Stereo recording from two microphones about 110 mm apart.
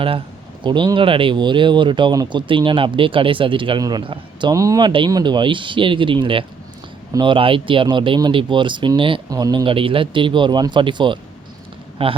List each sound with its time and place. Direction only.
0.6 s speech: 45° right (ahead or behind)
4.5 s a man's voice: 30° right (ahead or behind)
4.8 s speech: 45° right (ahead or behind)
9.3 s a man's voice: 35° right (ahead or behind)
9.6 s speech: 55° right (ahead or behind)
12.0 s speech: 60° right (ahead or behind)